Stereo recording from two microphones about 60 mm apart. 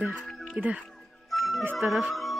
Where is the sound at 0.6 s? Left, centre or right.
Centre.